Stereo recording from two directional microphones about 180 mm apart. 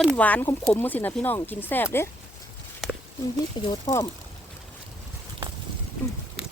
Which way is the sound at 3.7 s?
15° left (ahead or behind).